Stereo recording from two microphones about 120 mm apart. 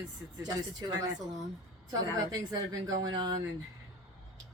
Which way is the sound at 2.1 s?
30° right (ahead or behind).